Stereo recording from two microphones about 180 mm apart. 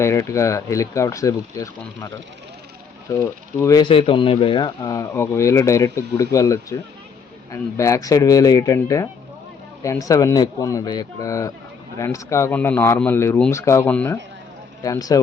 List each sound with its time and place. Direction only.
0.0 s speech: 15° left (ahead or behind)
3.1 s speech: 15° left (ahead or behind)
14.8 s speech: 20° left (ahead or behind)